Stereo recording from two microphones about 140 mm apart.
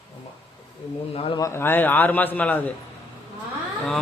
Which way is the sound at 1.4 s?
20° left (ahead or behind).